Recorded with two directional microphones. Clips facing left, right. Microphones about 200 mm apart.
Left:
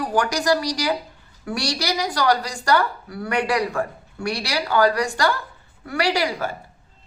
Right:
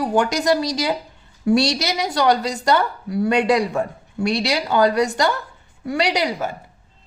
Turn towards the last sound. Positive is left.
turn(degrees=-20)  # may be behind; listen again after turning